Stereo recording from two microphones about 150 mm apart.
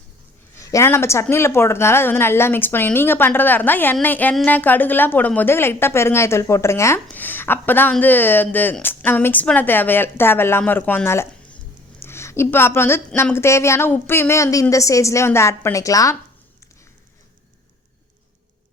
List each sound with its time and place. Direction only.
0.5 s speech: 20° left (ahead or behind)
11.9 s a sound: 15° left (ahead or behind)
13.3 s a woman's voice: 15° left (ahead or behind)